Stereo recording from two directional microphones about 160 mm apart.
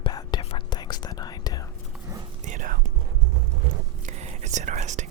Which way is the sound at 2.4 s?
55° right (ahead or behind).